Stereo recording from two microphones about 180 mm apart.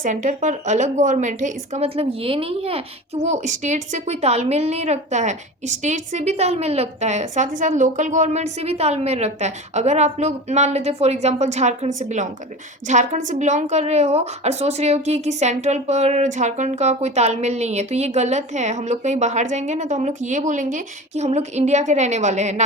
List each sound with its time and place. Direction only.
0.0 s speech: 45° right (ahead or behind)